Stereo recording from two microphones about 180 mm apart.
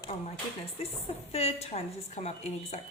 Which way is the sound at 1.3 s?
35° left (ahead or behind).